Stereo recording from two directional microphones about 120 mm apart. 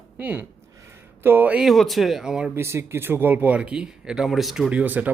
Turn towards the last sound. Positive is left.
turn(degrees=-10)  # may be behind; listen again after turning